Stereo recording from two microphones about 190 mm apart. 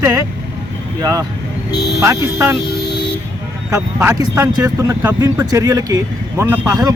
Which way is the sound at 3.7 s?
15° right (ahead or behind).